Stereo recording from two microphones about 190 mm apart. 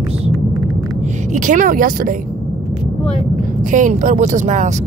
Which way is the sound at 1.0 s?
40° right (ahead or behind).